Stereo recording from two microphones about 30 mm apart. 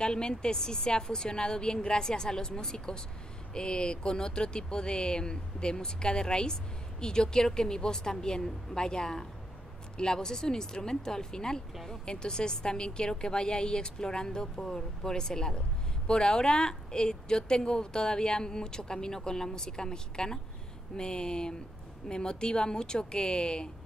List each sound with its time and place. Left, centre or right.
0.0 s speech: left